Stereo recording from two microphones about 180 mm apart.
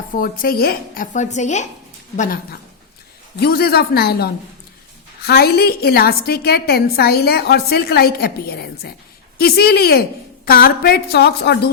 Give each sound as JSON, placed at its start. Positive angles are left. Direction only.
{"t": 0.2, "sound": "a woman's voice", "side_deg": 55}
{"t": 1.1, "sound": "a woman's voice", "side_deg": 40}
{"t": 3.4, "sound": "a woman's voice", "side_deg": 60}